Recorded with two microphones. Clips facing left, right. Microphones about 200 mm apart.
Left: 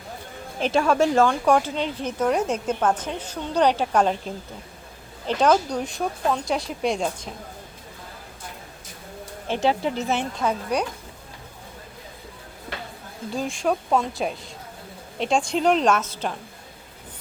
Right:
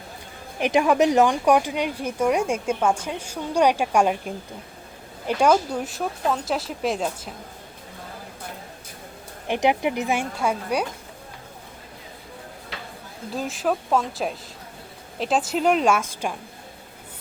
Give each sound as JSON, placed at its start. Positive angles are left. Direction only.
{"t": 0.6, "sound": "speech", "side_deg": -15}
{"t": 5.2, "sound": "speech", "side_deg": -10}
{"t": 9.5, "sound": "speech", "side_deg": -15}
{"t": 13.3, "sound": "speech", "side_deg": -5}